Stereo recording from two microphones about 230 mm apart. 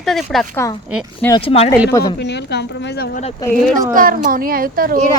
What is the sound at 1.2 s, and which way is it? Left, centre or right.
Speech, left.